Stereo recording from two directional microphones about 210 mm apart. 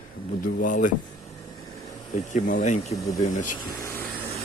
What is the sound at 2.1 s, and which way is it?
Speech, 40° left (ahead or behind).